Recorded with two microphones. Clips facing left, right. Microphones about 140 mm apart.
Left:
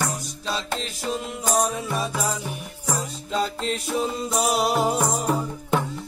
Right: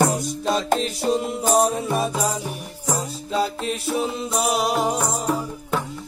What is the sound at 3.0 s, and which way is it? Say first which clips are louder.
Music: right 2 dB; 5° right (ahead or behind).